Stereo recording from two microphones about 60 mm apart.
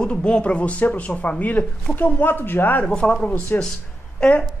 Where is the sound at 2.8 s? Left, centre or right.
Centre.